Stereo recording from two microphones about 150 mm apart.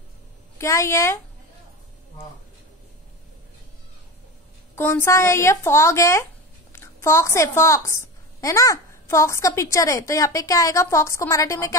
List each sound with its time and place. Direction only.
0.6 s a woman's voice: 20° left (ahead or behind)
4.7 s a woman's voice: 15° left (ahead or behind)